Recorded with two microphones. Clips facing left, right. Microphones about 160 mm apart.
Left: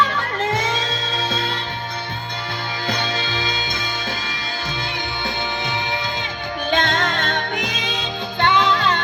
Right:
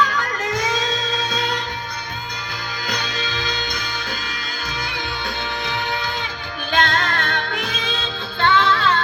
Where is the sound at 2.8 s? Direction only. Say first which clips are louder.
Left 3 dB; 25° left (ahead or behind).